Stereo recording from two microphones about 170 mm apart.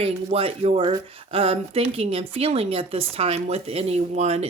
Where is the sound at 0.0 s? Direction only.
35° right (ahead or behind).